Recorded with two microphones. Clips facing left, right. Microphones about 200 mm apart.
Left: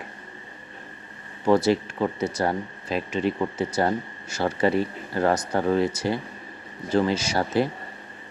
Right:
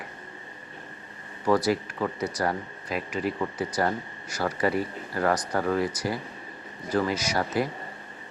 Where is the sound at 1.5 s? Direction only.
25° left (ahead or behind).